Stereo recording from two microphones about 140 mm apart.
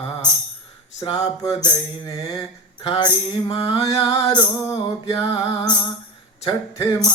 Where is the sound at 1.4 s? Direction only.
25° left (ahead or behind).